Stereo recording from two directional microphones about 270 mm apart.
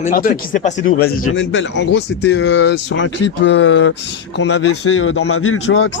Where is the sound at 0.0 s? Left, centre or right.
Left.